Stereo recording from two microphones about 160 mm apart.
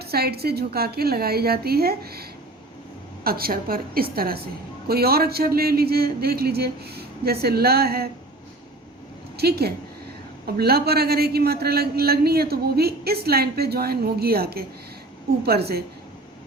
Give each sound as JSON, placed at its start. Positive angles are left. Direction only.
{"t": 0.0, "sound": "a man's voice", "side_deg": -75}
{"t": 3.2, "sound": "a man's voice", "side_deg": -70}
{"t": 9.4, "sound": "a woman's voice", "side_deg": -85}